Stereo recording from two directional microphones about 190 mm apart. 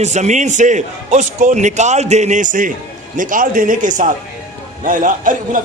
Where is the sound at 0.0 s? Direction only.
35° right (ahead or behind).